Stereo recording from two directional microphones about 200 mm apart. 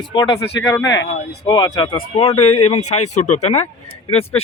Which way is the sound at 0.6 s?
10° left (ahead or behind).